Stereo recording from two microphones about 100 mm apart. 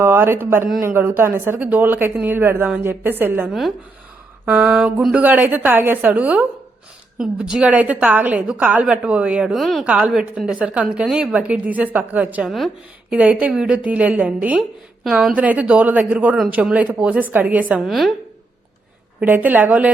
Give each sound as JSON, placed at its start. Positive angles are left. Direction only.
{"t": 0.0, "sound": "a woman's voice", "side_deg": -25}
{"t": 12.5, "sound": "a woman's voice", "side_deg": 0}
{"t": 13.1, "sound": "a woman's voice", "side_deg": -15}
{"t": 19.2, "sound": "a woman's voice", "side_deg": -15}